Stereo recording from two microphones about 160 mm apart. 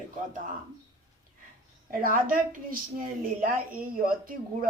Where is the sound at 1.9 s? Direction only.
60° right (ahead or behind).